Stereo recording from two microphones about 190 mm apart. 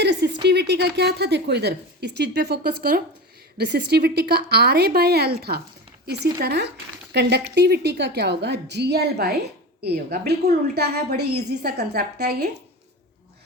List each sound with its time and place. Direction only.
0.0 s a woman's voice: 60° right (ahead or behind)